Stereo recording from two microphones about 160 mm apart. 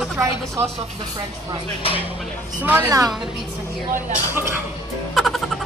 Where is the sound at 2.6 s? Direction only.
10° right (ahead or behind).